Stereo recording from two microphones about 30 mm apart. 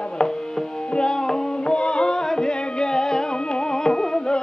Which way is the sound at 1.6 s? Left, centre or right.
Left.